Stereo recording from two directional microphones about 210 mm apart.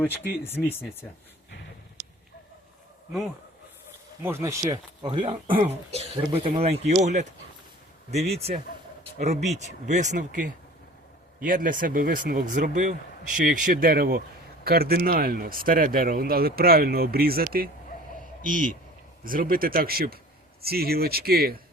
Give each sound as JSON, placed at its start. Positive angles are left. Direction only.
{"t": 0.6, "sound": "speech", "side_deg": 5}
{"t": 4.2, "sound": "speech", "side_deg": -10}
{"t": 4.6, "sound": "speech", "side_deg": -20}